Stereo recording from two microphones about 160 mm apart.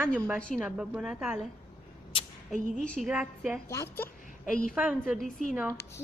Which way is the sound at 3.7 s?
20° left (ahead or behind).